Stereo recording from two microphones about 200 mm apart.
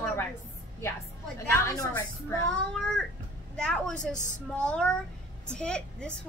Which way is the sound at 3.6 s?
5° left (ahead or behind).